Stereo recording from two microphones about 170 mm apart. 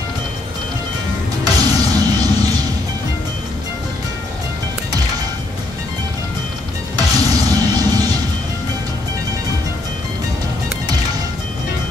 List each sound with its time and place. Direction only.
1.4 s music: 25° right (ahead or behind)
7.0 s music: 20° right (ahead or behind)